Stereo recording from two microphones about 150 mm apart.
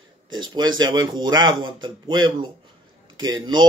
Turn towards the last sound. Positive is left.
turn(degrees=-30)  # may be behind; listen again after turning